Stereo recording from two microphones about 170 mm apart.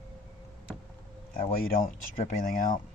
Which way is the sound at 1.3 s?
55° left (ahead or behind).